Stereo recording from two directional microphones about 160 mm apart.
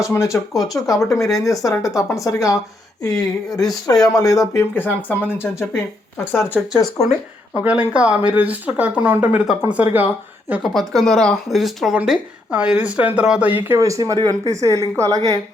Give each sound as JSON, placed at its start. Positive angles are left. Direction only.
{"t": 0.0, "sound": "speech", "side_deg": 20}
{"t": 0.5, "sound": "speech", "side_deg": 0}
{"t": 1.3, "sound": "speech", "side_deg": 20}
{"t": 6.5, "sound": "speech", "side_deg": 0}
{"t": 10.5, "sound": "a woman's voice", "side_deg": 0}